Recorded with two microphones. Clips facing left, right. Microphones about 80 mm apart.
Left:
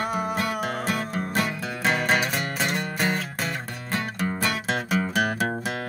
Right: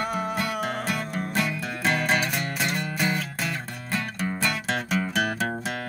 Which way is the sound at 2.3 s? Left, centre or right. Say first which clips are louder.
Left 1 dB; left.